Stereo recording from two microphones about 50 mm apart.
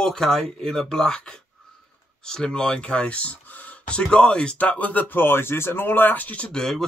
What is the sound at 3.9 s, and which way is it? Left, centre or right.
Speech, centre.